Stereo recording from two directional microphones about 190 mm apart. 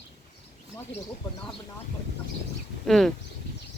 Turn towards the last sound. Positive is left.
turn(degrees=0)  # may be behind; listen again after turning